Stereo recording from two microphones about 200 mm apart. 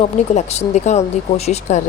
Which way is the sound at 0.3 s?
35° left (ahead or behind).